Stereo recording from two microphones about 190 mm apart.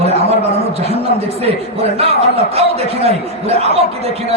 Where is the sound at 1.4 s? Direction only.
30° right (ahead or behind).